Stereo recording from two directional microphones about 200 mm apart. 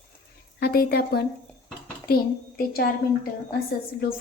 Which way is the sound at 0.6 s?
50° left (ahead or behind).